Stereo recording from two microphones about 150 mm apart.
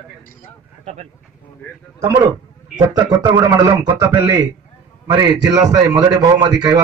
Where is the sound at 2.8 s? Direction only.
25° right (ahead or behind).